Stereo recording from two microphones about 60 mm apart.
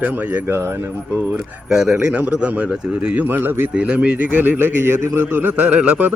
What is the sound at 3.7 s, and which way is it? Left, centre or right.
Speech, centre.